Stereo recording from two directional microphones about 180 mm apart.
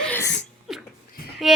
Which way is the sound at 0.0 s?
10° left (ahead or behind).